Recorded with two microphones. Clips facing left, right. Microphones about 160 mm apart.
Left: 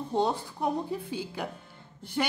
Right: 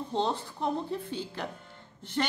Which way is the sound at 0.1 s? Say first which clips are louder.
Left 3 dB; 10° left (ahead or behind).